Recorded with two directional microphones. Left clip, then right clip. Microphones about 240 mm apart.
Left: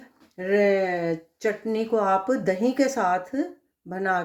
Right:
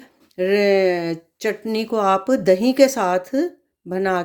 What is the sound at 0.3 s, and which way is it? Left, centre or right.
Speech, right.